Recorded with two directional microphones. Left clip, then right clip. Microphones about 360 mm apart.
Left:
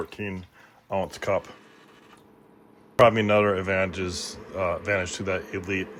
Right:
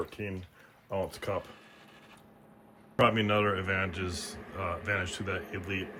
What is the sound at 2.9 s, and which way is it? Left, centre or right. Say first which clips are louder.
Speech: left 8 dB; centre.